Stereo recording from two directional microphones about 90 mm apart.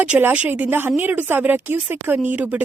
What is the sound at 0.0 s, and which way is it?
A woman's voice, 20° right (ahead or behind).